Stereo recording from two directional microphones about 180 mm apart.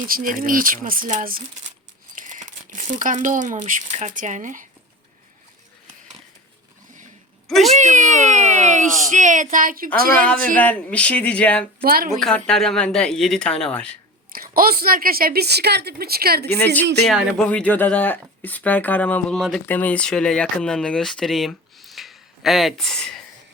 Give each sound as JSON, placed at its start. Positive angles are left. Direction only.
{"t": 0.1, "sound": "speech", "side_deg": -50}
{"t": 7.4, "sound": "a sound", "side_deg": 0}
{"t": 7.7, "sound": "a sound", "side_deg": -45}
{"t": 10.5, "sound": "speech", "side_deg": 10}
{"t": 11.8, "sound": "a woman's voice", "side_deg": -55}
{"t": 12.2, "sound": "speech", "side_deg": 5}
{"t": 14.3, "sound": "a woman's voice", "side_deg": -55}
{"t": 17.1, "sound": "speech", "side_deg": 0}